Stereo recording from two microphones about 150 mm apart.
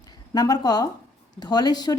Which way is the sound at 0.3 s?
25° left (ahead or behind).